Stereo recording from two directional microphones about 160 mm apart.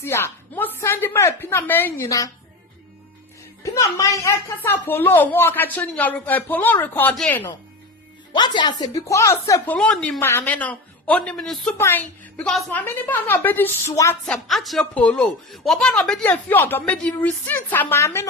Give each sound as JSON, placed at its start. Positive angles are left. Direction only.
{"t": 0.0, "sound": "a woman's voice", "side_deg": 15}
{"t": 3.6, "sound": "speech", "side_deg": 20}
{"t": 8.3, "sound": "speech", "side_deg": 30}
{"t": 11.8, "sound": "speech", "side_deg": 10}
{"t": 14.3, "sound": "speech", "side_deg": 0}